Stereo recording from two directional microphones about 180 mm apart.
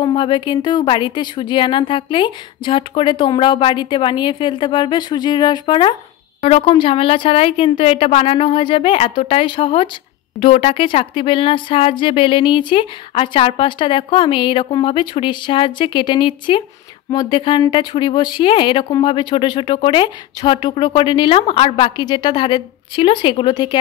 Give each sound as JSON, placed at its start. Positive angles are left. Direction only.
{"t": 0.0, "sound": "a woman's voice", "side_deg": 25}